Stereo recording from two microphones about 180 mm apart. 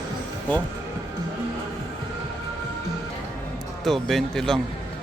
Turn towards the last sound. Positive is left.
turn(degrees=0)  # may be behind; listen again after turning